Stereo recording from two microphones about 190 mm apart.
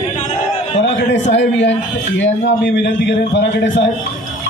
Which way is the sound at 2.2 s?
65° left (ahead or behind).